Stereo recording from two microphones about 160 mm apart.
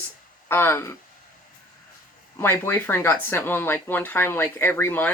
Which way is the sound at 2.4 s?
15° left (ahead or behind).